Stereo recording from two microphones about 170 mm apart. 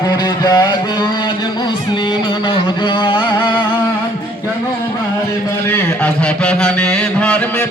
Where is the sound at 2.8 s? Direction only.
30° left (ahead or behind).